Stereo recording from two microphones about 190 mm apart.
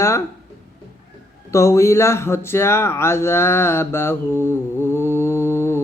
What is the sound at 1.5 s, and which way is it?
Speech, 15° left (ahead or behind).